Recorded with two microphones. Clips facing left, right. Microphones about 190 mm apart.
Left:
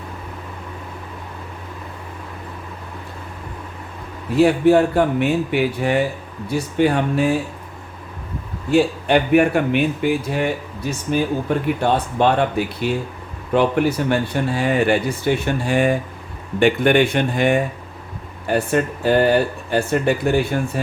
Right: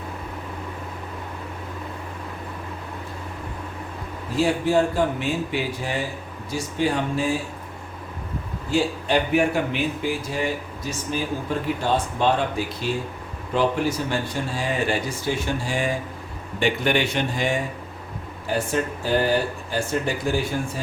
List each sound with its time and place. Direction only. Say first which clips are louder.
4.4 s speech: left 7 dB; 60° left (ahead or behind)
8.7 s speech: left 6 dB; 60° left (ahead or behind)